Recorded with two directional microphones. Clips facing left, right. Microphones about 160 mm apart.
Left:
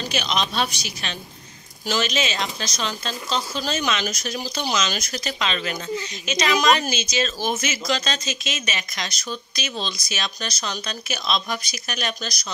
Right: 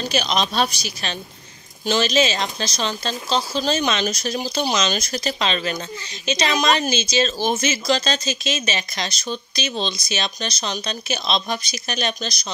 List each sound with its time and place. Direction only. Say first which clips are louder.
0.1 s speech: right 3 dB; 40° right (ahead or behind)